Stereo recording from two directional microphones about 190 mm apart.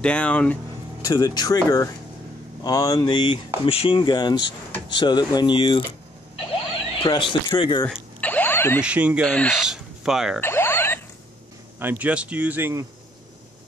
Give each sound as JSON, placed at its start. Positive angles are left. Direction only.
{"t": 0.0, "sound": "speech", "side_deg": 5}
{"t": 1.0, "sound": "speech", "side_deg": 20}
{"t": 7.0, "sound": "speech", "side_deg": 25}
{"t": 8.2, "sound": "a sound", "side_deg": 10}
{"t": 8.8, "sound": "speech", "side_deg": -5}
{"t": 9.2, "sound": "speech", "side_deg": 5}
{"t": 10.4, "sound": "a sound", "side_deg": 10}
{"t": 11.8, "sound": "speech", "side_deg": -10}